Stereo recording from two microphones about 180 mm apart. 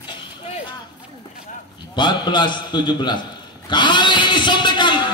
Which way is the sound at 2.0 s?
25° left (ahead or behind).